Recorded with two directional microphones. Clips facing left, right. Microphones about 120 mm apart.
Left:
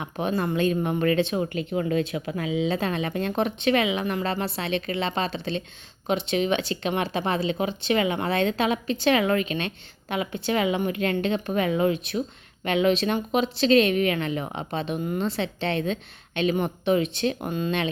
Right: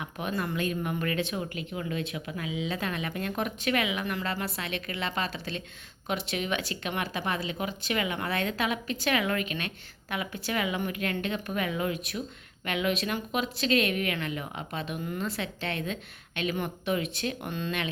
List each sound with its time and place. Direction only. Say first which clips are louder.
0.0 s speech: left 6 dB; 30° left (ahead or behind)